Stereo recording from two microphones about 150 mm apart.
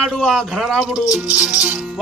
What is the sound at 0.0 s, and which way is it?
Speech, 5° left (ahead or behind).